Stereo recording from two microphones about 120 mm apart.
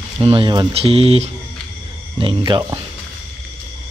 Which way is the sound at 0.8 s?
55° right (ahead or behind).